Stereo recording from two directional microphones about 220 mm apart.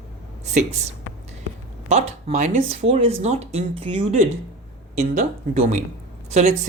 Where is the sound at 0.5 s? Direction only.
30° right (ahead or behind).